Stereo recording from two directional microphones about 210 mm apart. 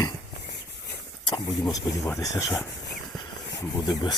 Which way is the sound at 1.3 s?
15° left (ahead or behind).